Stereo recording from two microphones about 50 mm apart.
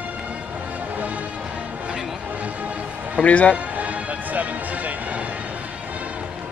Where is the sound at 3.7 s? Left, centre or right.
Right.